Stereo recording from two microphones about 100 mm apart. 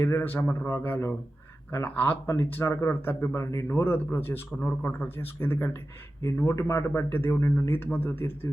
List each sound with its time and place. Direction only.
0.0 s speech: 25° left (ahead or behind)